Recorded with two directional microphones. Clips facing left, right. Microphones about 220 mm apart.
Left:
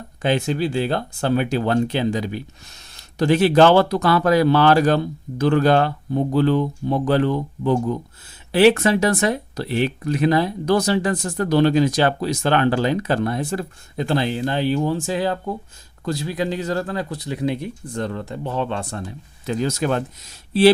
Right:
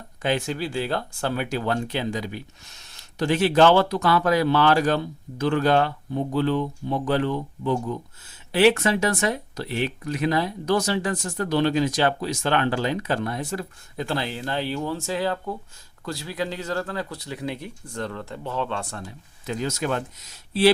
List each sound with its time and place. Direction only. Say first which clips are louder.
0.2 s speech: left 5 dB; 25° left (ahead or behind)
19.5 s speech: left 5 dB; 35° left (ahead or behind)